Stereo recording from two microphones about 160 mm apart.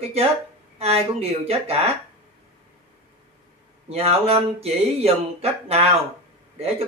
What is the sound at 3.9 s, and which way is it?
Speech, 40° right (ahead or behind).